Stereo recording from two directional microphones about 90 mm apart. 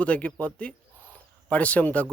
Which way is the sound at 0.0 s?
15° left (ahead or behind).